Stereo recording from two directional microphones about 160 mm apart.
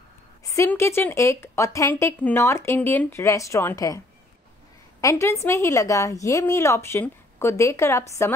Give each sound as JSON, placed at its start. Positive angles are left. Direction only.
{"t": 0.5, "sound": "a woman's voice", "side_deg": 20}
{"t": 5.0, "sound": "a woman's voice", "side_deg": 15}